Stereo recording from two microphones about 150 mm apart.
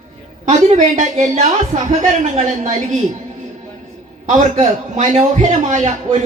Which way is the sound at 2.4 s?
55° right (ahead or behind).